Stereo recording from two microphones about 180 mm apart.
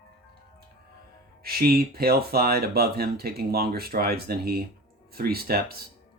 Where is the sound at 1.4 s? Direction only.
60° right (ahead or behind).